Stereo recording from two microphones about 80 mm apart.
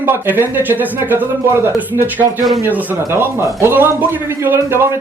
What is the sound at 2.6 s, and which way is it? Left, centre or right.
A man's voice, right.